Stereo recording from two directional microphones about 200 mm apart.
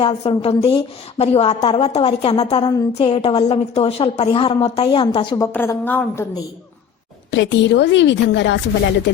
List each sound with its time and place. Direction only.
0.0 s a woman's voice: 30° left (ahead or behind)
5.5 s a woman's voice: 10° left (ahead or behind)
7.3 s a woman's voice: 65° left (ahead or behind)